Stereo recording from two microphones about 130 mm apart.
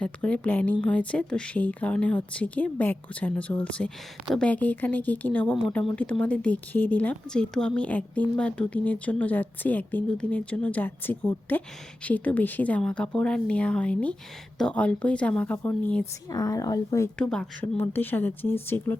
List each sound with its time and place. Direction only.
0.0 s speech: 10° left (ahead or behind)
16.3 s speech: 25° left (ahead or behind)
17.2 s speech: 5° left (ahead or behind)